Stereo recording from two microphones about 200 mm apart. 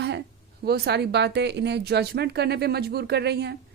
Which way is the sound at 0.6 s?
55° right (ahead or behind).